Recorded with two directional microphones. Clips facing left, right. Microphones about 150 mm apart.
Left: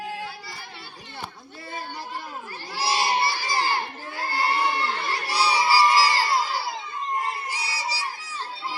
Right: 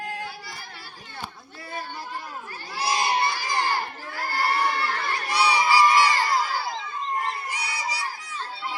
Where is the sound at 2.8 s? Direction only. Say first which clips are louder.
Even; 30° left (ahead or behind).